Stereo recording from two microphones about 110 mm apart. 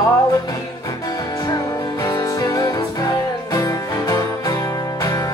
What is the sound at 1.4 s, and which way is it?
Music, 35° left (ahead or behind).